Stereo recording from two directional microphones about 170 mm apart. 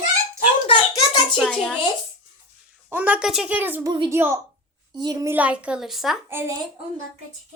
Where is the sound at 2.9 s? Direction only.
10° right (ahead or behind).